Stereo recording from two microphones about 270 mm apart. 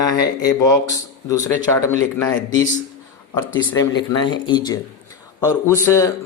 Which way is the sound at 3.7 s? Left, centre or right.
Centre.